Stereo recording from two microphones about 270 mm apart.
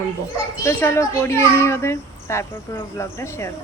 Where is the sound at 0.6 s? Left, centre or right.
Centre.